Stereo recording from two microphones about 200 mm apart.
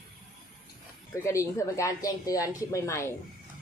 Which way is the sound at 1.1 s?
15° left (ahead or behind).